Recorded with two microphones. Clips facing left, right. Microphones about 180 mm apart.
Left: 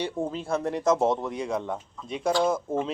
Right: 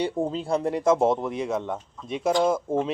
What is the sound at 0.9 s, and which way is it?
Speech, 25° right (ahead or behind).